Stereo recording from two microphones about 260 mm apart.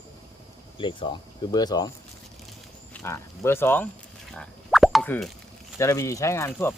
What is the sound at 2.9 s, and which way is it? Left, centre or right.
Speech, centre.